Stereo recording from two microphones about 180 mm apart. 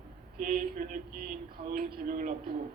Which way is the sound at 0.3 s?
50° right (ahead or behind).